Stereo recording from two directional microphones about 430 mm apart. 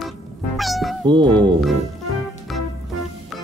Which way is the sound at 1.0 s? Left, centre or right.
Centre.